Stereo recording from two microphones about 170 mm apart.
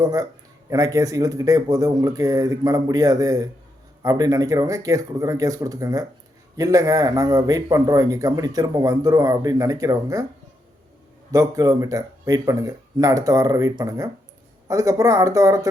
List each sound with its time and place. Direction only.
0.0 s a man's voice: 20° right (ahead or behind)
11.3 s a man's voice: 20° right (ahead or behind)